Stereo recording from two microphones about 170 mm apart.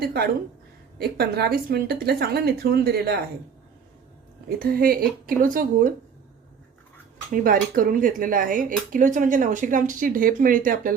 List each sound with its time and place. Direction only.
0.0 s speech: 70° right (ahead or behind)
4.4 s a woman's voice: 60° right (ahead or behind)
7.4 s speech: 55° right (ahead or behind)